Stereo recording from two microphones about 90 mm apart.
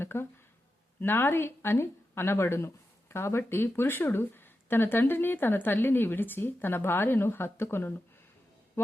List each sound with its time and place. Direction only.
0.0 s speech: 25° left (ahead or behind)